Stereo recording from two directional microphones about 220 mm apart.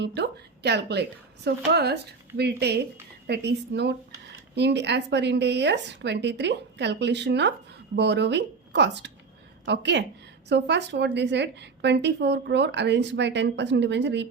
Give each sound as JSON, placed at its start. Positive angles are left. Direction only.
{"t": 0.0, "sound": "a woman's voice", "side_deg": -50}